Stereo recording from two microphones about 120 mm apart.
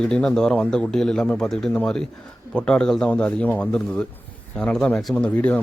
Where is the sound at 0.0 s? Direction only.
5° left (ahead or behind).